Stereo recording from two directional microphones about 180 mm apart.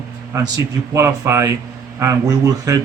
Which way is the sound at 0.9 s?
15° right (ahead or behind).